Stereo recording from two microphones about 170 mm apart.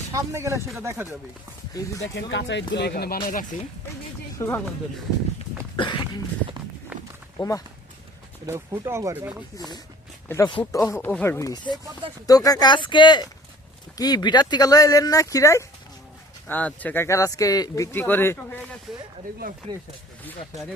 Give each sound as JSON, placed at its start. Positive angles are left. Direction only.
{"t": 0.1, "sound": "speech", "side_deg": -15}
{"t": 1.7, "sound": "speech", "side_deg": 20}
{"t": 2.1, "sound": "speech", "side_deg": 90}
{"t": 4.4, "sound": "speech", "side_deg": 15}
{"t": 5.7, "sound": "a sound", "side_deg": 30}
{"t": 6.9, "sound": "walk", "side_deg": -5}
{"t": 7.3, "sound": "speech", "side_deg": 20}
{"t": 8.4, "sound": "speech", "side_deg": -15}
{"t": 9.6, "sound": "speech", "side_deg": 25}
{"t": 18.9, "sound": "speech", "side_deg": -5}
{"t": 19.7, "sound": "speech", "side_deg": -25}